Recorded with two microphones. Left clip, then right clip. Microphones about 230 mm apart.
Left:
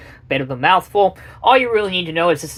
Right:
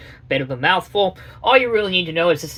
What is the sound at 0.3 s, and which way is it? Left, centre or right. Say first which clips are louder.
Speech: left 3 dB; left.